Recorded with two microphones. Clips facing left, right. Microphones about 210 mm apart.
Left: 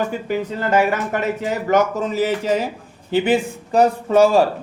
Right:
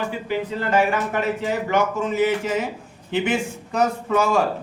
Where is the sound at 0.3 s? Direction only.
45° left (ahead or behind).